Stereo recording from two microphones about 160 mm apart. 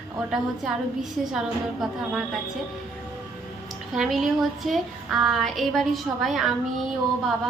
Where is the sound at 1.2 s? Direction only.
Centre (ahead or behind).